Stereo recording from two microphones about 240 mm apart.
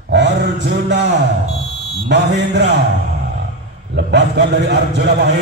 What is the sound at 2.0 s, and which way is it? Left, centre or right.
Mantra, right.